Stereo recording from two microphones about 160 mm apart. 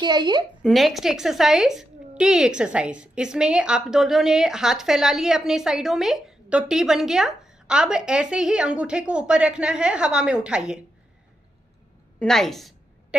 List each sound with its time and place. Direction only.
0.0 s a woman's voice: 25° right (ahead or behind)
0.6 s a woman's voice: centre (ahead or behind)
12.2 s a sound: 5° left (ahead or behind)